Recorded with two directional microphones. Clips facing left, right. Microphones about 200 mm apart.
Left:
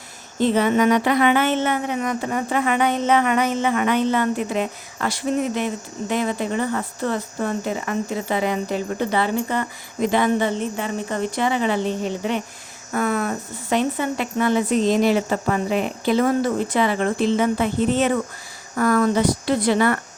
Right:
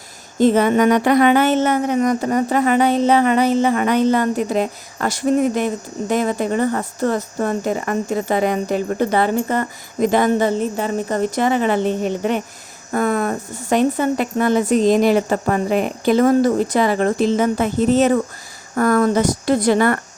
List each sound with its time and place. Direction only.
0.3 s speech: 45° right (ahead or behind)